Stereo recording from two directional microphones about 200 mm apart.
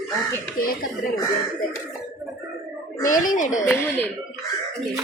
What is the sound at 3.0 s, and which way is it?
Speech, 40° left (ahead or behind).